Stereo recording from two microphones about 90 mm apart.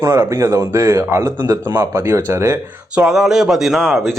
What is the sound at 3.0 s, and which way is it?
Speech, 5° right (ahead or behind).